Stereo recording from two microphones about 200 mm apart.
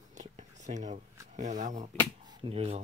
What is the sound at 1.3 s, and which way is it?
Speech, 35° right (ahead or behind).